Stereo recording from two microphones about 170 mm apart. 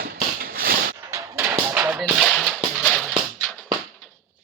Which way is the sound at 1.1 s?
15° right (ahead or behind).